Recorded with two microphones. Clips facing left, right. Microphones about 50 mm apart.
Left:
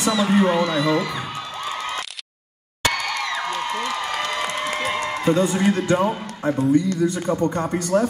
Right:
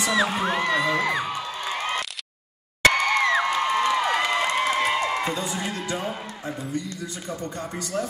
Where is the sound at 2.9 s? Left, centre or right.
Right.